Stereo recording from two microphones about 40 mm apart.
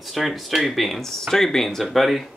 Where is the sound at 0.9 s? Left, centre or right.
Centre.